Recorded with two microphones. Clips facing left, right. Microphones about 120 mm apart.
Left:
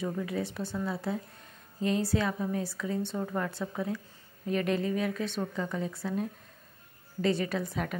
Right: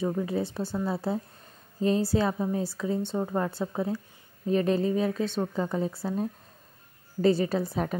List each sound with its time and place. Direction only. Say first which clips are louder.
0.0 s a woman's voice: right 4 dB; 30° right (ahead or behind)